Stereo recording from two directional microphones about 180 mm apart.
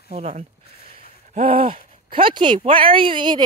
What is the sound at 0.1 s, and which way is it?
Speech, 40° right (ahead or behind).